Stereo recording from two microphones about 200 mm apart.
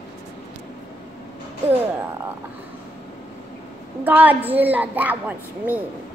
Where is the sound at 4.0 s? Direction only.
10° right (ahead or behind).